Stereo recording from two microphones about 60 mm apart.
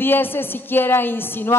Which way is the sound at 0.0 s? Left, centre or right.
Left.